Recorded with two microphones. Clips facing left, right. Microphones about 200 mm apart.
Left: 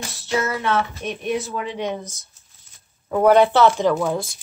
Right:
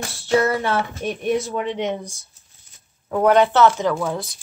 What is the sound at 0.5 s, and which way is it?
Child singing, 30° right (ahead or behind).